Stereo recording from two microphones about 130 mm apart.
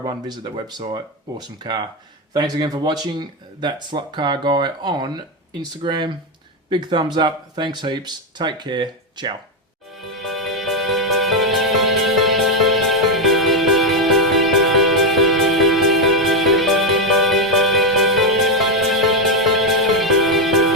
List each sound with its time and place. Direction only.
0.0 s speech: 35° right (ahead or behind)
10.0 s music: centre (ahead or behind)